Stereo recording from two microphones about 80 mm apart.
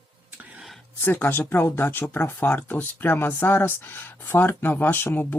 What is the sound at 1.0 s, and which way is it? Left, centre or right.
Speech, left.